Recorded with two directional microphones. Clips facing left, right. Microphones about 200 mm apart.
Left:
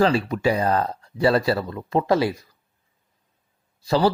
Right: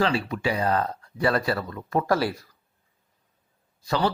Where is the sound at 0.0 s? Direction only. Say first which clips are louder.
Left 5 dB; 40° left (ahead or behind); by 2.5 s 20° left (ahead or behind).